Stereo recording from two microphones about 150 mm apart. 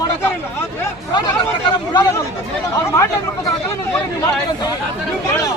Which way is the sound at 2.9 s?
20° left (ahead or behind).